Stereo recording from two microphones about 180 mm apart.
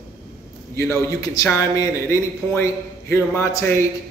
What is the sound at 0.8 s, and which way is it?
A man's voice, 15° left (ahead or behind).